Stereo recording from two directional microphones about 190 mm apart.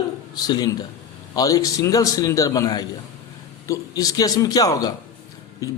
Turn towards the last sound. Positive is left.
turn(degrees=15)  # may be behind; listen again after turning